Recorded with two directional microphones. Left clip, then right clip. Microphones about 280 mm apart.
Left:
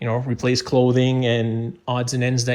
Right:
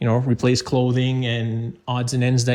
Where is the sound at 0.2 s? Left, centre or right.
Centre.